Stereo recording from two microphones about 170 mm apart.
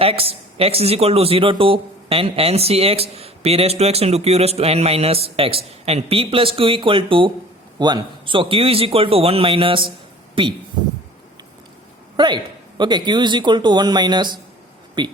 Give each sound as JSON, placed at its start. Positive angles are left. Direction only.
{"t": 0.0, "sound": "speech", "side_deg": -35}
{"t": 12.1, "sound": "speech", "side_deg": -25}